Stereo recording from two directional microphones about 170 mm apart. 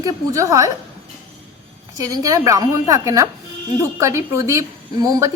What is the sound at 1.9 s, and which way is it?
A woman's voice, 20° right (ahead or behind).